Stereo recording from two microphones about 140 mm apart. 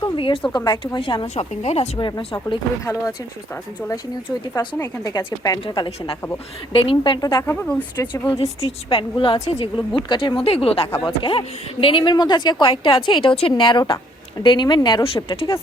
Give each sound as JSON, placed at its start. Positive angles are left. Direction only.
{"t": 0.0, "sound": "a sound", "side_deg": 35}
{"t": 0.5, "sound": "a woman's voice", "side_deg": 30}
{"t": 1.4, "sound": "speech", "side_deg": 50}
{"t": 2.0, "sound": "a woman's voice", "side_deg": 35}
{"t": 2.8, "sound": "a woman's voice", "side_deg": 20}
{"t": 7.5, "sound": "speech", "side_deg": 10}
{"t": 8.6, "sound": "a woman's voice", "side_deg": 40}